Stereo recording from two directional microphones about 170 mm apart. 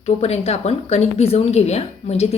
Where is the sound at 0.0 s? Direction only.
40° left (ahead or behind).